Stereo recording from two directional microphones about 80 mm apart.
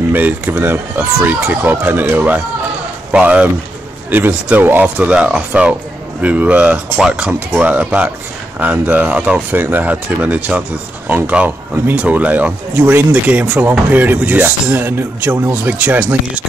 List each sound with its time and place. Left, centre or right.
0.1 s speech: right